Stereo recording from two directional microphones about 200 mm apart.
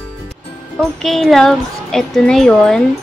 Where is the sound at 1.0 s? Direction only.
Centre (ahead or behind).